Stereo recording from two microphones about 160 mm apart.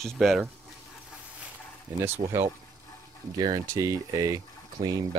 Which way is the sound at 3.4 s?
25° right (ahead or behind).